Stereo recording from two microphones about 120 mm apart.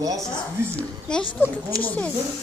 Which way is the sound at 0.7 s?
5° left (ahead or behind).